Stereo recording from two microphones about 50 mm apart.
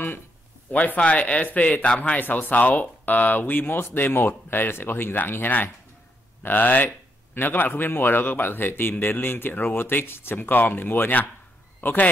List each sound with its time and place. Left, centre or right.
0.7 s a man's voice: left